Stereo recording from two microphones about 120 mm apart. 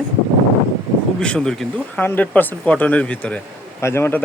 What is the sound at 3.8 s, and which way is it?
Speech, 20° left (ahead or behind).